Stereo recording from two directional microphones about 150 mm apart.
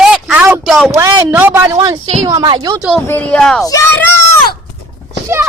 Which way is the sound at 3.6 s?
20° left (ahead or behind).